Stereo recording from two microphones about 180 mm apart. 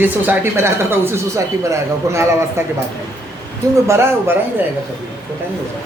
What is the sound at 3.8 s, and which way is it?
Speech, 15° right (ahead or behind).